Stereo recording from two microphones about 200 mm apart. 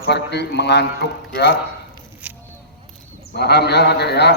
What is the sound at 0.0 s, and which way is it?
Speech, 55° left (ahead or behind).